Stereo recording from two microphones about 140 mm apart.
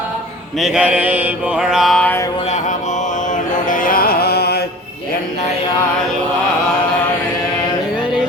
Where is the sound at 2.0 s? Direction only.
20° left (ahead or behind).